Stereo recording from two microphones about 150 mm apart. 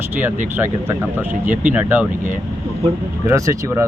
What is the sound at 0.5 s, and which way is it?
Speech, 15° right (ahead or behind).